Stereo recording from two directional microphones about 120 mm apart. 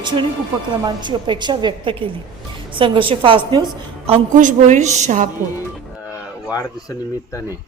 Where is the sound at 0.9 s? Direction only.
40° right (ahead or behind).